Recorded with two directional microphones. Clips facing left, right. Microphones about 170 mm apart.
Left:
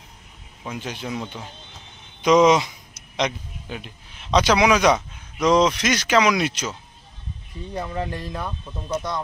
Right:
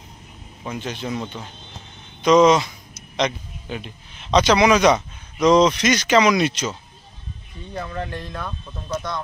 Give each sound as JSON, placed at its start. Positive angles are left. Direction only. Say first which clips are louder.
{"t": 0.7, "sound": "speech", "louder": "right 2 dB", "side_deg": 10}